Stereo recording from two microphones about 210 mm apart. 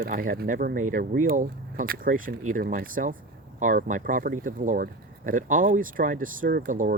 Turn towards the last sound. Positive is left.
turn(degrees=-40)  # may be behind; listen again after turning